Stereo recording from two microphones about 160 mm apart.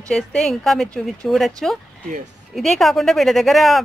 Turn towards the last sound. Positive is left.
turn(degrees=0)  # may be behind; listen again after turning